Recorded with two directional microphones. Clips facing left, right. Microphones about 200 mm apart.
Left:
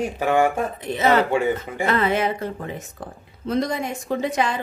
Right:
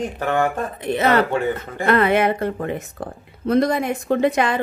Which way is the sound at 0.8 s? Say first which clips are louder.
Right 4 dB; 60° right (ahead or behind).